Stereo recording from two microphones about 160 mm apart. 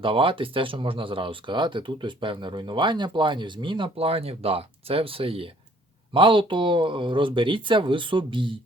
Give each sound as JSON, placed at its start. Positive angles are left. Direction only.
{"t": 0.0, "sound": "speech", "side_deg": -35}